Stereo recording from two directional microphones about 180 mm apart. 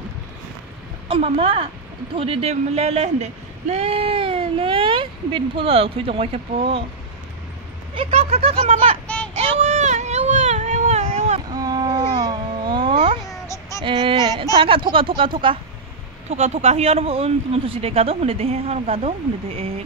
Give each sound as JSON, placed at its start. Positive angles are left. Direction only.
{"t": 1.0, "sound": "speech", "side_deg": -30}
{"t": 7.9, "sound": "speech", "side_deg": -30}
{"t": 9.0, "sound": "child singing", "side_deg": 5}
{"t": 9.6, "sound": "a sound", "side_deg": -40}
{"t": 11.5, "sound": "babbling", "side_deg": -20}
{"t": 13.3, "sound": "a sound", "side_deg": 15}
{"t": 13.8, "sound": "speech", "side_deg": -25}